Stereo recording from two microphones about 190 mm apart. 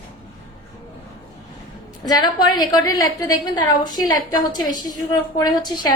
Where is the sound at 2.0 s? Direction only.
20° left (ahead or behind).